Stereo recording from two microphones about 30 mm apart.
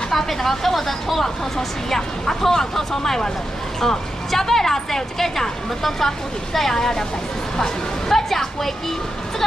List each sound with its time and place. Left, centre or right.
0.1 s a woman's voice: centre
1.9 s a woman's voice: centre